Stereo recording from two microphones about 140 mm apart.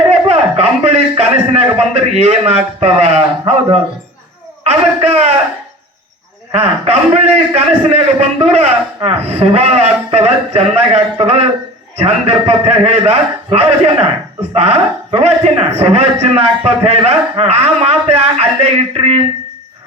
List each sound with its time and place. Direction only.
0.1 s a sound: 50° right (ahead or behind)
4.6 s a man's voice: 50° right (ahead or behind)
6.5 s a man's voice: 45° right (ahead or behind)